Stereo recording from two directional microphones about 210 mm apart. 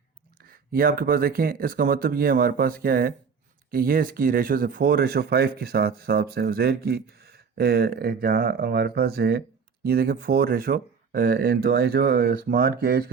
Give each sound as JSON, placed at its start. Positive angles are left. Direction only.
{"t": 0.4, "sound": "speech", "side_deg": -45}